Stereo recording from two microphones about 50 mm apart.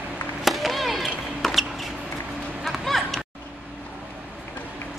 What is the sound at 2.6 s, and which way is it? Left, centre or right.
Run, centre.